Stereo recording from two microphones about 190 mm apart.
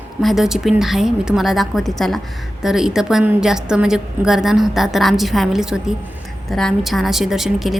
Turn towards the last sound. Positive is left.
turn(degrees=0)  # may be behind; listen again after turning